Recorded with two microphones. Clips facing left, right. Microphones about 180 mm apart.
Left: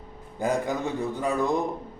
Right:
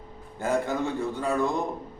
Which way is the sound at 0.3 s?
15° left (ahead or behind).